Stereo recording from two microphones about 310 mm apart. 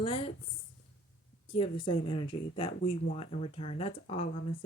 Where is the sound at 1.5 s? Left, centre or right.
Centre.